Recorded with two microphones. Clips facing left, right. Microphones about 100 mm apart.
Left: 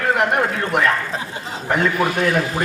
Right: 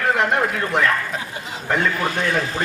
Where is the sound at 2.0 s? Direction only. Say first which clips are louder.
Left 3 dB; 30° right (ahead or behind).